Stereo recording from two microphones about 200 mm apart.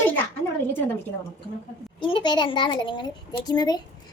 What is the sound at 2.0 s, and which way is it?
A woman's voice, 25° left (ahead or behind).